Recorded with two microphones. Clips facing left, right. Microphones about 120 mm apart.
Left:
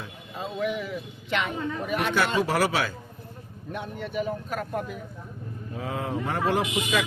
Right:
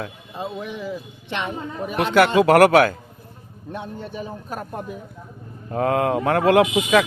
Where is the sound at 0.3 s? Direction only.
30° right (ahead or behind).